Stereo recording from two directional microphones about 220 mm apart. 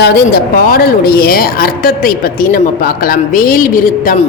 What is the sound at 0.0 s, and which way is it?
Speech, 45° left (ahead or behind).